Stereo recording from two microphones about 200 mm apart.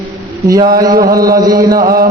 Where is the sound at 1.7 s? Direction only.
45° right (ahead or behind).